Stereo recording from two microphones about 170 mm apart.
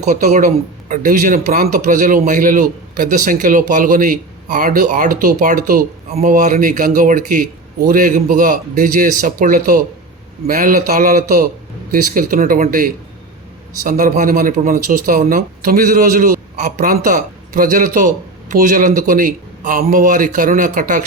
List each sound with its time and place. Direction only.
0.0 s a man's voice: 45° right (ahead or behind); by 5.8 s 60° right (ahead or behind)
6.1 s a man's voice: 50° right (ahead or behind)